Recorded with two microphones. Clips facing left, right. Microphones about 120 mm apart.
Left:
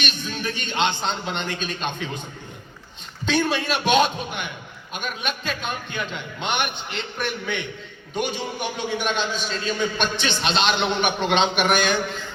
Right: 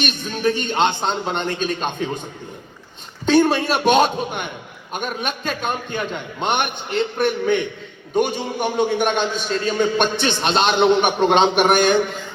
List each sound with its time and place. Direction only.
0.0 s a man's voice: 40° right (ahead or behind)
3.2 s a man's voice: 45° right (ahead or behind)